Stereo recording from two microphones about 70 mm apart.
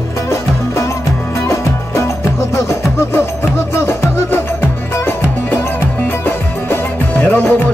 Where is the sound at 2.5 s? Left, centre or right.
Left.